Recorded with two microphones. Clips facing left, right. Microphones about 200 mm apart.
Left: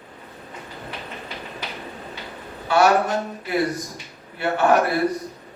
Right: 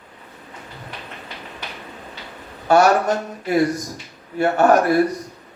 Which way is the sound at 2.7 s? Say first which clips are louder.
Right 4 dB; 45° right (ahead or behind).